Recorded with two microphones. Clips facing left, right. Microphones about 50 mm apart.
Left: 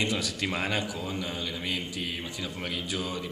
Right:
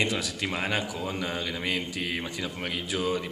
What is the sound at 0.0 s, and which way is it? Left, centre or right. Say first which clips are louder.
Speech: right 1 dB; right.